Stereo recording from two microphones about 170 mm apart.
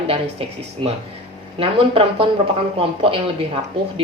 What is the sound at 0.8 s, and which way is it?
A woman's voice, 30° right (ahead or behind).